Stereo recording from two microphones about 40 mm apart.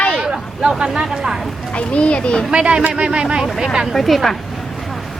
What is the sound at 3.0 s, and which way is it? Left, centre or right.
Speech, right.